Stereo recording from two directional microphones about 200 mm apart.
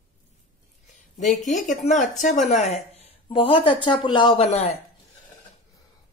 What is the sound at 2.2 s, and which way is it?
Speech, 40° left (ahead or behind).